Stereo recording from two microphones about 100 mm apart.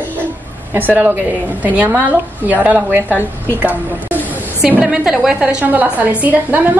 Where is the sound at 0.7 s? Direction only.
20° right (ahead or behind).